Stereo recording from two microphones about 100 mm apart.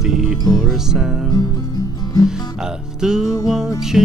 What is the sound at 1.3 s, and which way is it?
Music, 40° left (ahead or behind).